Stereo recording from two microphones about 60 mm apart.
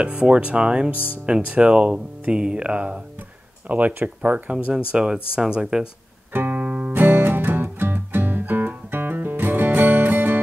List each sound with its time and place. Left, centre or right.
0.0 s speech: right
0.9 s speech: left
1.2 s speech: centre
6.3 s music: right
6.6 s music: right